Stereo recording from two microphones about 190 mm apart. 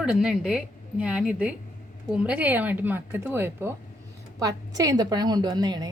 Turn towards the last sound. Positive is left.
turn(degrees=-20)  # may be behind; listen again after turning